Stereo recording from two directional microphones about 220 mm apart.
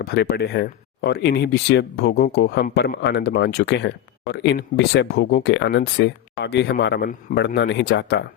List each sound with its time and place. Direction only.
0.0 s speech: 45° left (ahead or behind)